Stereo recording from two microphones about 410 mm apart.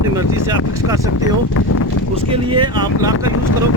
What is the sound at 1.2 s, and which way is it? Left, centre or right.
Speech, left.